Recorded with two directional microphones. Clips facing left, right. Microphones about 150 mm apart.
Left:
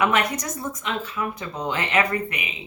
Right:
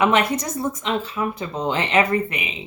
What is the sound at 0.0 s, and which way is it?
Speech, 30° right (ahead or behind).